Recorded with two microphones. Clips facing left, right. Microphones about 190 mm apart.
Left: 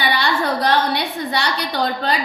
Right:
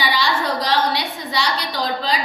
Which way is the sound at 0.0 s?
60° left (ahead or behind).